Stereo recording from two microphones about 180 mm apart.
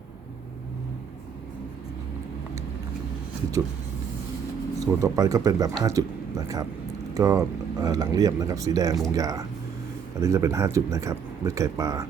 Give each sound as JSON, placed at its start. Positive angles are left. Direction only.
{"t": 4.8, "sound": "speech", "side_deg": -20}